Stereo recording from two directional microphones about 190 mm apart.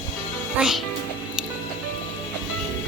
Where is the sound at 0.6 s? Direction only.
Centre (ahead or behind).